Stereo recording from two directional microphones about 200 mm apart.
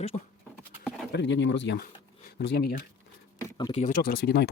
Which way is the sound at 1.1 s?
60° left (ahead or behind).